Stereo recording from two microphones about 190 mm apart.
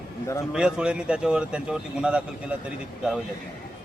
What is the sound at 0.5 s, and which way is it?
Speech, 5° right (ahead or behind).